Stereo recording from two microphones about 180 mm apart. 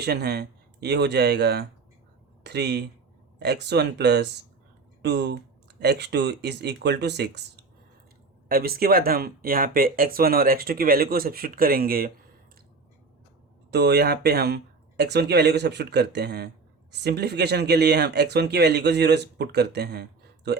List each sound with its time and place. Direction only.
0.0 s speech: 65° right (ahead or behind)
8.4 s speech: 55° right (ahead or behind)
13.7 s speech: 65° right (ahead or behind)